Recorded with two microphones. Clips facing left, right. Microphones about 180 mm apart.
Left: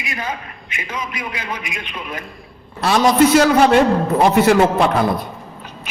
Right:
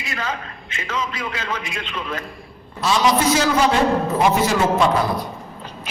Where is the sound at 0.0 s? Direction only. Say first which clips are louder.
Left 1 dB; 15° left (ahead or behind).